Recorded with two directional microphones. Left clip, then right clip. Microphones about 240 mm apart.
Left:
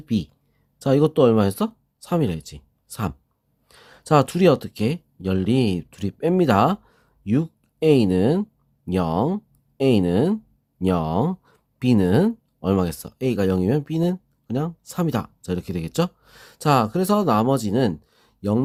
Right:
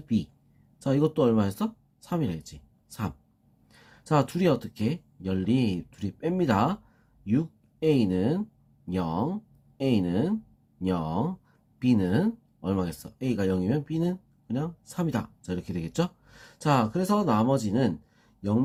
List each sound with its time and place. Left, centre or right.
0.0 s speech: left